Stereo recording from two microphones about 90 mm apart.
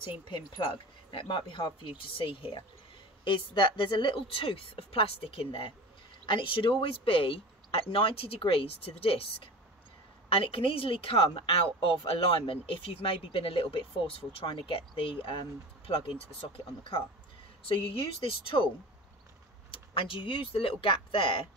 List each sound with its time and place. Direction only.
0.3 s a woman's voice: 70° left (ahead or behind)
19.7 s a woman's voice: 75° left (ahead or behind)